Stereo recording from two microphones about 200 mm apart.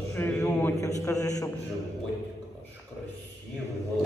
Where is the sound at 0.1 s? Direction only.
10° left (ahead or behind).